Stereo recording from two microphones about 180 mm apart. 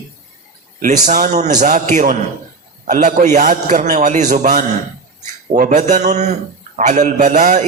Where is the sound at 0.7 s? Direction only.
45° right (ahead or behind).